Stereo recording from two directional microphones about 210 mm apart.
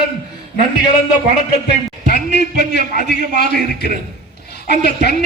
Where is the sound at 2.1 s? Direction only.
40° right (ahead or behind).